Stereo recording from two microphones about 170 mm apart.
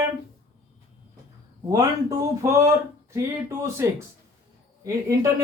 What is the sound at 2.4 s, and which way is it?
Speech, 15° right (ahead or behind).